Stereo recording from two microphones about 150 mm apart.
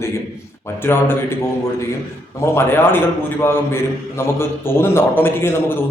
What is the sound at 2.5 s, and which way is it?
A man's voice, 15° left (ahead or behind).